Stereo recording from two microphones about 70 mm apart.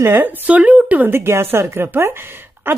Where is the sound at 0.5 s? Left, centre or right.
Centre.